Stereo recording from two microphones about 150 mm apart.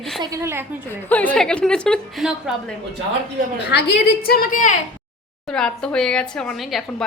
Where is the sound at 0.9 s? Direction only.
10° left (ahead or behind).